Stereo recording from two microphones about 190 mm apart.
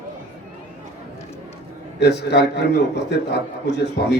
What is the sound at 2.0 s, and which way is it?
A man's voice, 60° left (ahead or behind).